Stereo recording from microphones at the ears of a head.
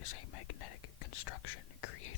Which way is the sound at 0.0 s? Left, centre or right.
Left.